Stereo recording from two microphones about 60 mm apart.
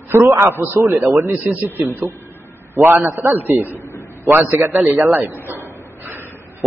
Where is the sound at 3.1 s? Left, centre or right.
Right.